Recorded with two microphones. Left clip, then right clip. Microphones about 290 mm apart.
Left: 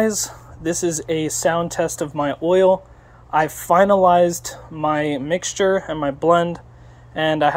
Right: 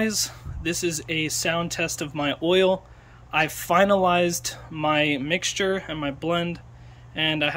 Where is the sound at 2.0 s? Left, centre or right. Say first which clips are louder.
Left 5 dB; centre.